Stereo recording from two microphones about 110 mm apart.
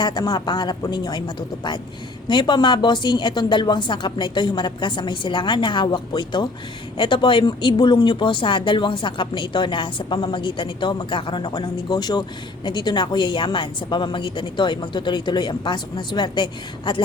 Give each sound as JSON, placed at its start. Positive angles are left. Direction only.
{"t": 0.0, "sound": "speech", "side_deg": 40}